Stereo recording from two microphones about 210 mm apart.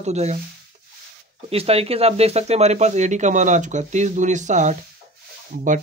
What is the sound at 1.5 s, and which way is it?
Speech, 30° right (ahead or behind).